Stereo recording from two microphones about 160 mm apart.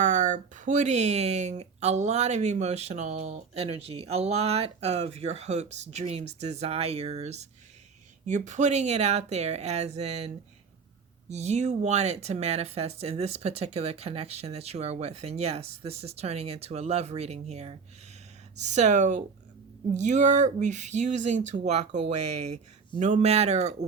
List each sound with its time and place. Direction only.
0.0 s speech: 55° right (ahead or behind)